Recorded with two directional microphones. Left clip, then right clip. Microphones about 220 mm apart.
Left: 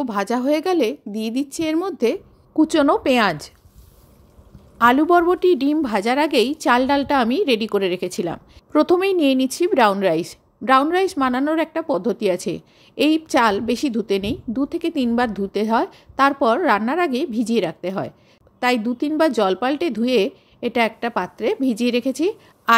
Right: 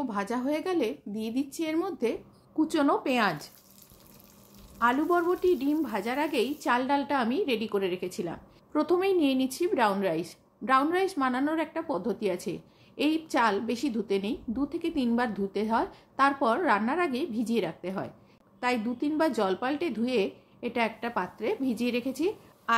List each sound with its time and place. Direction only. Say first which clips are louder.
0.0 s a woman's voice: left 10 dB; 40° left (ahead or behind)
4.7 s a woman's voice: left 11 dB; 45° left (ahead or behind)